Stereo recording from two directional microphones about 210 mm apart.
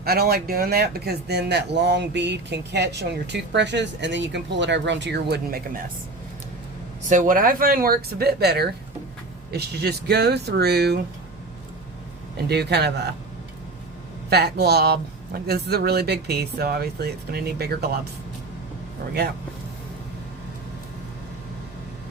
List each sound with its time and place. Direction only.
0.0 s speech: 45° right (ahead or behind)
7.1 s speech: 40° right (ahead or behind)
12.5 s speech: 50° right (ahead or behind)
14.3 s speech: 50° right (ahead or behind)